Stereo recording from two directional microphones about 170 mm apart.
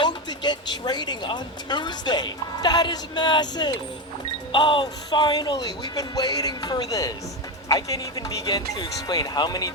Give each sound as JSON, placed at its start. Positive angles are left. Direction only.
{"t": 0.0, "sound": "speech", "side_deg": 25}